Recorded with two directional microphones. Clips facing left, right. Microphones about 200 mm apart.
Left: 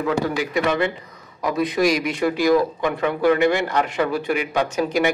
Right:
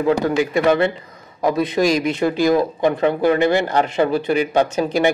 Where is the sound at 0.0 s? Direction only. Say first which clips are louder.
Right 5 dB; 30° right (ahead or behind).